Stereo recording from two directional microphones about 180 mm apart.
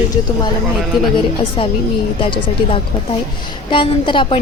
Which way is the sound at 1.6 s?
25° left (ahead or behind).